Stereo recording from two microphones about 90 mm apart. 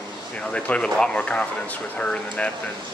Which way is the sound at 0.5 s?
10° left (ahead or behind).